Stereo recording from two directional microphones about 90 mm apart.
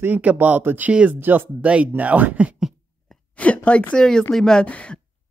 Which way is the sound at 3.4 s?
15° left (ahead or behind).